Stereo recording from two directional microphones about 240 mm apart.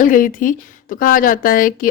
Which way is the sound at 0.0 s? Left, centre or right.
Left.